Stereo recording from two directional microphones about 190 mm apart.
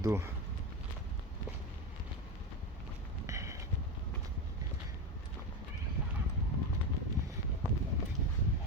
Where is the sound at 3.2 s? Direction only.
15° right (ahead or behind).